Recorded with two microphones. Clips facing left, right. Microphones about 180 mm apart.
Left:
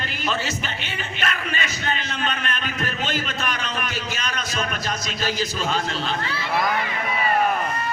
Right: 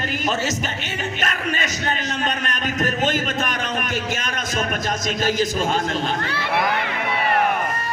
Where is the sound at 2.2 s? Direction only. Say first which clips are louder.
Right 1 dB; 40° right (ahead or behind).